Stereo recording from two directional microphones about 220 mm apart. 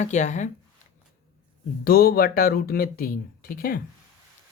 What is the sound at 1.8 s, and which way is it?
Speech, 45° left (ahead or behind).